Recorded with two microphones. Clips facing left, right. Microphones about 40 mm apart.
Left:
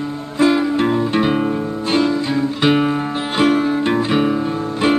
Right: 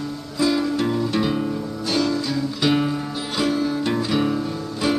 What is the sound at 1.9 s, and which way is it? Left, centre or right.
Guitar, left.